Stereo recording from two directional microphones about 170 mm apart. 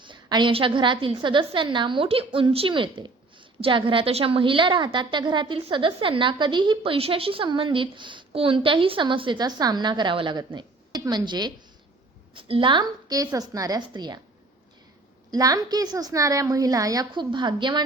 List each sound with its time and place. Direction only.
0.0 s a woman's voice: 25° right (ahead or behind)
15.3 s a woman's voice: 20° right (ahead or behind)